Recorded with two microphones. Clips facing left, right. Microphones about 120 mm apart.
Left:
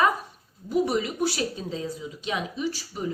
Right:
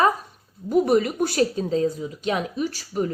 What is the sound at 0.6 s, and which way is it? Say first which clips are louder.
Speech: right 6 dB; 50° right (ahead or behind).